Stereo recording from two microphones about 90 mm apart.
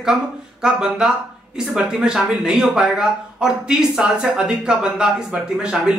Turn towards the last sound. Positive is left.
turn(degrees=-10)  # may be behind; listen again after turning